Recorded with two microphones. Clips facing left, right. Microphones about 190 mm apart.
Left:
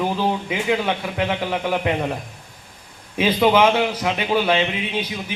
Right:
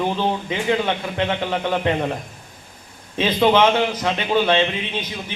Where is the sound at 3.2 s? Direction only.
10° left (ahead or behind).